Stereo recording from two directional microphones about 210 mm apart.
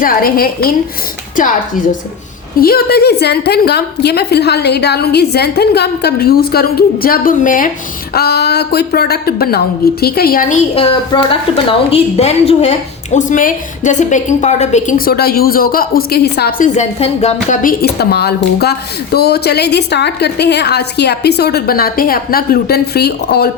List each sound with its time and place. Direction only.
0.0 s a woman's voice: 45° left (ahead or behind)
10.8 s a woman's voice: 25° left (ahead or behind); by 23.5 s 50° left (ahead or behind)